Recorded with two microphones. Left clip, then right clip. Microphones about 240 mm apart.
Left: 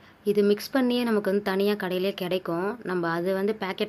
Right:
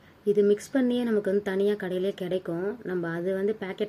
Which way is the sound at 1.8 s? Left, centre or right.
Left.